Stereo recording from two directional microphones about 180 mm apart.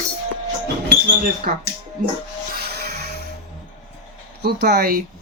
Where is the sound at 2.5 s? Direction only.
60° right (ahead or behind).